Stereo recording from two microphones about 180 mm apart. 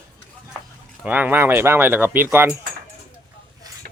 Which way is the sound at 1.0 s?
10° right (ahead or behind).